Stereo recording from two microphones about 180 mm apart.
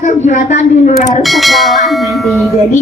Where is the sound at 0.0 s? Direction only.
40° left (ahead or behind).